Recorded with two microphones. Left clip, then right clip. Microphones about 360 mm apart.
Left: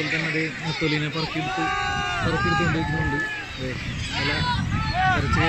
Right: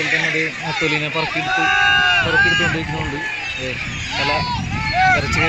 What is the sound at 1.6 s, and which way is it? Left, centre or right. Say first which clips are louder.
Speech: right 12 dB; right.